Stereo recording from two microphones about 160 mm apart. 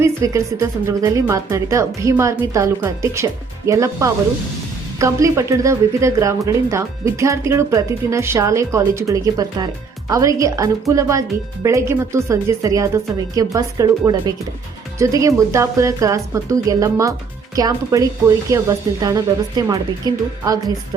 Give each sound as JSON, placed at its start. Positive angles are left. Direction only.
{"t": 0.0, "sound": "speech", "side_deg": -15}